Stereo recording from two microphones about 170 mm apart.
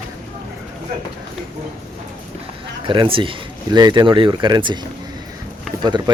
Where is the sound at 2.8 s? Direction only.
30° right (ahead or behind).